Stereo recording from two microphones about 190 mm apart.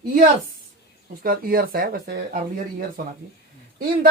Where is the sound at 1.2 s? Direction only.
50° right (ahead or behind).